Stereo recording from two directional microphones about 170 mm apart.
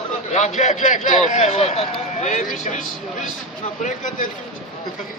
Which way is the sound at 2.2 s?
50° left (ahead or behind).